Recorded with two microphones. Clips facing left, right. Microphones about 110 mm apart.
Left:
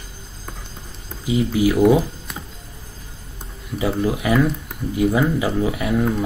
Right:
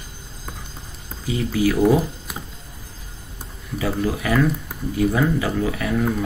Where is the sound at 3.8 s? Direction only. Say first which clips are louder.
Left 2 dB; 20° left (ahead or behind).